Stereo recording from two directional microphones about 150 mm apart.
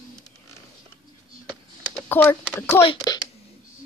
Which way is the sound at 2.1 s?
15° left (ahead or behind).